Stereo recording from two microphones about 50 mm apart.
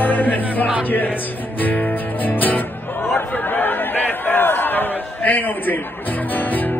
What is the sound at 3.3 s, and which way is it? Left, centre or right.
Crowd, left.